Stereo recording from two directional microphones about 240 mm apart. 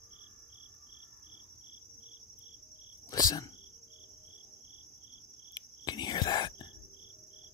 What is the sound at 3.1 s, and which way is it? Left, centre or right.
Cricket, centre.